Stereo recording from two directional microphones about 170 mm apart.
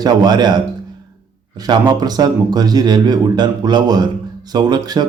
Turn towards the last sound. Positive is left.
turn(degrees=-25)  # may be behind; listen again after turning